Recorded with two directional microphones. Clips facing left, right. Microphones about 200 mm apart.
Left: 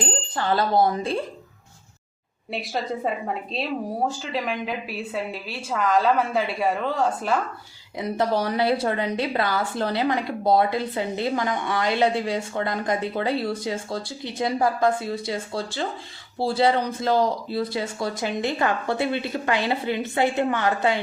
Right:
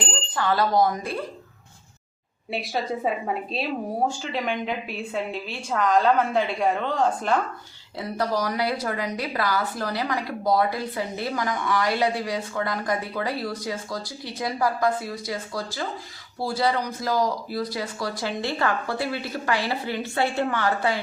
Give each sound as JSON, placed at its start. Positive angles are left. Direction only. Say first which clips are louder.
{"t": 0.0, "sound": "speech", "louder": "left 1 dB", "side_deg": 30}
{"t": 2.5, "sound": "speech", "louder": "even", "side_deg": 0}
{"t": 7.9, "sound": "a woman's voice", "louder": "left 3 dB", "side_deg": 20}